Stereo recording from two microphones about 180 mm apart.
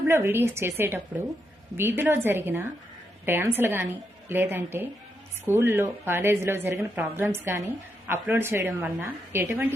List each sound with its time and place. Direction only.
0.1 s a woman's voice: 15° right (ahead or behind)